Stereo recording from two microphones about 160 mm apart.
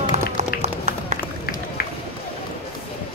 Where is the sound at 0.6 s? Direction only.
45° right (ahead or behind).